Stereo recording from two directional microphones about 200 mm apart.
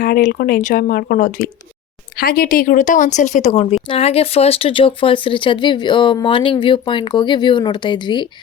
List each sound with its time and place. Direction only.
0.0 s speech: 45° left (ahead or behind); by 8.2 s 25° left (ahead or behind)